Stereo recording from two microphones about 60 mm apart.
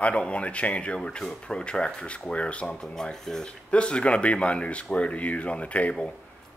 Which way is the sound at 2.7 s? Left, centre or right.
Centre.